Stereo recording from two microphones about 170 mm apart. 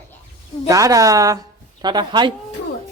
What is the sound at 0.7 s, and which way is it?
A woman's voice, 20° right (ahead or behind).